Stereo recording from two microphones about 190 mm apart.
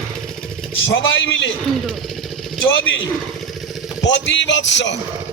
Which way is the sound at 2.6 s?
90° left.